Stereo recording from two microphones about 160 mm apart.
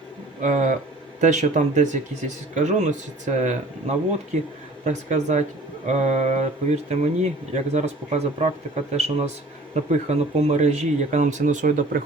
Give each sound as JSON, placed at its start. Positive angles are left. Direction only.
{"t": 0.4, "sound": "speech", "side_deg": -50}